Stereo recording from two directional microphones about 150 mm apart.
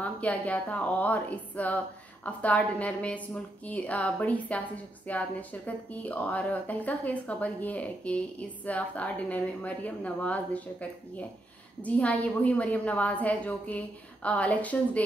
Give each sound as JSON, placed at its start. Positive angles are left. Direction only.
{"t": 0.0, "sound": "a woman's voice", "side_deg": 10}